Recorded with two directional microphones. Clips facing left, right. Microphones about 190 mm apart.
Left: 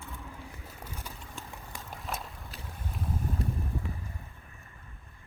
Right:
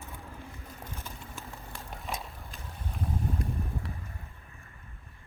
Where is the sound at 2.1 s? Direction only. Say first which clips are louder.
Even; centre (ahead or behind).